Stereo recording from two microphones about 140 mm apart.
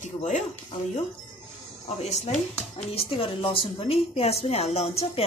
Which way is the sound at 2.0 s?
55° left (ahead or behind).